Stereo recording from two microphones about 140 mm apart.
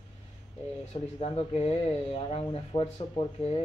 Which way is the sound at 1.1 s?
45° left (ahead or behind).